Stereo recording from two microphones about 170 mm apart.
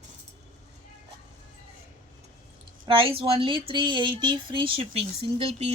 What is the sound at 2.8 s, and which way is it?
Speech, 30° right (ahead or behind).